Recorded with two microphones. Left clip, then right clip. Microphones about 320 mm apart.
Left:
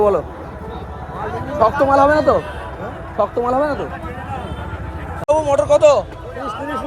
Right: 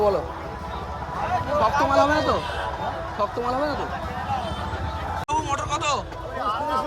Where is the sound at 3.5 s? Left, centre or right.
Left.